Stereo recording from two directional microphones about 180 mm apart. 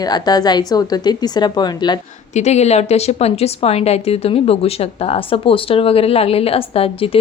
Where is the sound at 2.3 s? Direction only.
40° left (ahead or behind).